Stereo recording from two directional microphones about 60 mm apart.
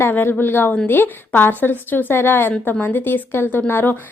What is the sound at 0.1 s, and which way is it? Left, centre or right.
A woman's voice, left.